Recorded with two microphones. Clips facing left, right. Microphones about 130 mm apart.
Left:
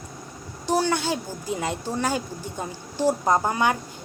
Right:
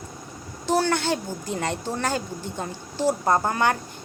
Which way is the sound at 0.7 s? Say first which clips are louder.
Right 1 dB; 10° left (ahead or behind).